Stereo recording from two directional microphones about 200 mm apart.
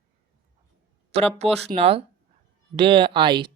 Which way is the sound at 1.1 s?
30° right (ahead or behind).